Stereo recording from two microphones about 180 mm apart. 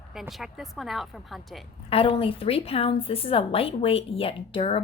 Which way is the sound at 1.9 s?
30° left (ahead or behind).